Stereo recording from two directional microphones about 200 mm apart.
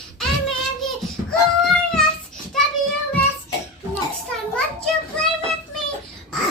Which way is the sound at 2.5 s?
Centre (ahead or behind).